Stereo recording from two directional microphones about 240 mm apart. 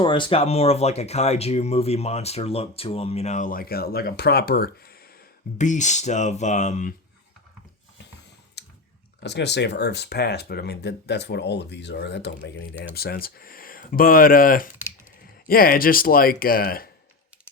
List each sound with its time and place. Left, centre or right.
0.0 s speech: centre
8.6 s clicking: left
9.2 s speech: left